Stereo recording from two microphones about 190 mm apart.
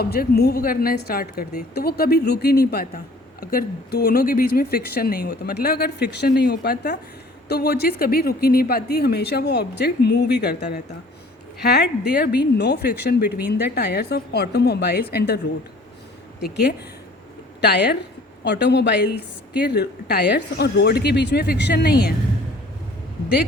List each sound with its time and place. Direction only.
0.0 s a woman's voice: 55° left (ahead or behind)
16.4 s a woman's voice: 60° left (ahead or behind)